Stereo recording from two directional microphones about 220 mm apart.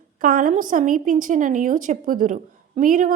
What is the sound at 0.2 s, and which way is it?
A woman's voice, 40° right (ahead or behind).